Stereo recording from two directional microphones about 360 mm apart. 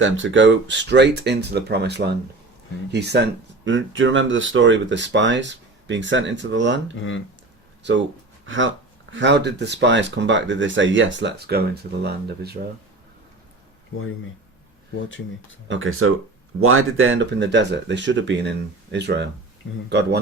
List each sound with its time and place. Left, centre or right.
0.0 s speech: right
6.9 s speech: left
7.9 s speech: right
15.7 s speech: right